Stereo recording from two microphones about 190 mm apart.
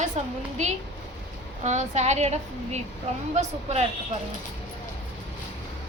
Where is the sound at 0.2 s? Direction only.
35° right (ahead or behind).